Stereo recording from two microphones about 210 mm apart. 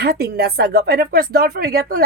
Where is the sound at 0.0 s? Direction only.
50° right (ahead or behind).